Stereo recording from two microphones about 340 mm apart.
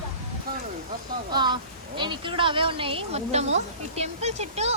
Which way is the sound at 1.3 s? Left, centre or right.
Centre.